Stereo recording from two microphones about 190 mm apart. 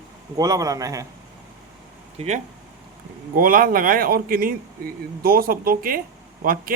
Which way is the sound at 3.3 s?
50° right (ahead or behind).